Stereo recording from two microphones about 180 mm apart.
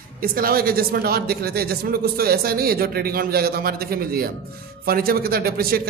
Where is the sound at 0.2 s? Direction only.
55° right (ahead or behind).